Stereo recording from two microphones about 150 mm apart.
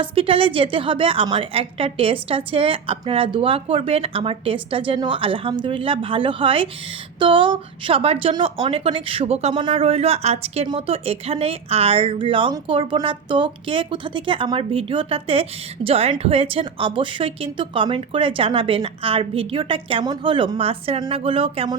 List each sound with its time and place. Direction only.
0.0 s a woman's voice: 35° right (ahead or behind)